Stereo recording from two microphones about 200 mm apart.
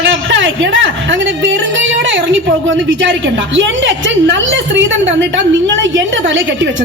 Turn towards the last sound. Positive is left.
turn(degrees=-70)  # may be behind; listen again after turning